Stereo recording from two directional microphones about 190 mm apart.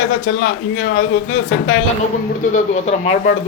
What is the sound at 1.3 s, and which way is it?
Speech, 90° left.